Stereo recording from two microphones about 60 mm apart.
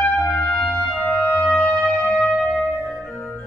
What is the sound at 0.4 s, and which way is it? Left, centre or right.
Trumpet, left.